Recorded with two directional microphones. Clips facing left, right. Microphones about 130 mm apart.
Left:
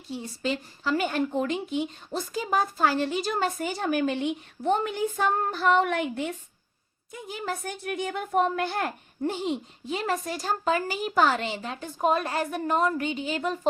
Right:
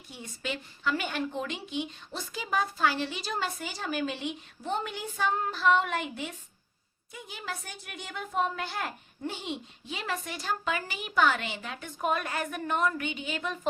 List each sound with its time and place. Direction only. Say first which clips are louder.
0.1 s speech: left 7 dB; 35° left (ahead or behind); by 6.0 s 55° left (ahead or behind)
7.3 s speech: left 8 dB; 45° left (ahead or behind)